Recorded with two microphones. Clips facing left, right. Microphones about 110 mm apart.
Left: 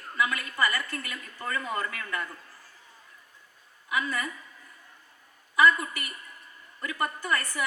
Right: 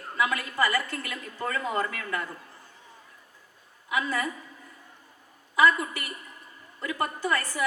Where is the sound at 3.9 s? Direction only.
25° right (ahead or behind).